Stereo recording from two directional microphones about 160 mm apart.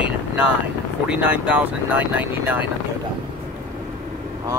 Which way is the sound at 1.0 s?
5° right (ahead or behind).